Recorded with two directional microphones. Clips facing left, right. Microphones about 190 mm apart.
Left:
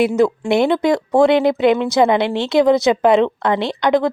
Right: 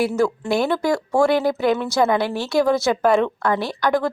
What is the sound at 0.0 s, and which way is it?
Speech, 20° left (ahead or behind).